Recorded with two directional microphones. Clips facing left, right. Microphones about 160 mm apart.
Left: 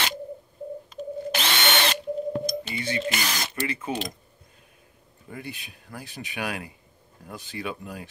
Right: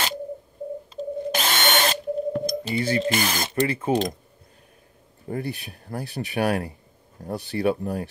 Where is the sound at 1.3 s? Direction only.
40° right (ahead or behind).